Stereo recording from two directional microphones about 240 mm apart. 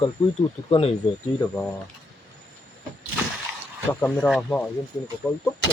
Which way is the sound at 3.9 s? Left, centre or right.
Centre.